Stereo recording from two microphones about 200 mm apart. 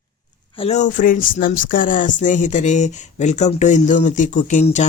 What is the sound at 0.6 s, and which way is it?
Speech, 35° left (ahead or behind).